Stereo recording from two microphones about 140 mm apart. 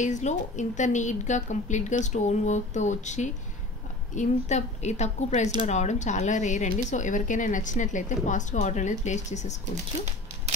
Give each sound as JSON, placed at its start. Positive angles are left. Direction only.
{"t": 0.0, "sound": "a woman's voice", "side_deg": 60}